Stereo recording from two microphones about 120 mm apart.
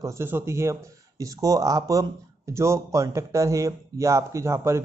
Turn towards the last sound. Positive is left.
turn(degrees=-20)  # may be behind; listen again after turning